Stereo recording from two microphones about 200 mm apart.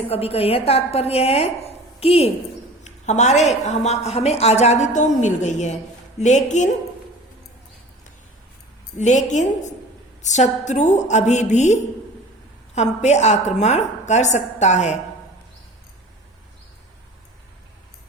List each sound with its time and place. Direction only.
0.1 s a woman's voice: 30° left (ahead or behind)
9.0 s a woman's voice: 35° left (ahead or behind)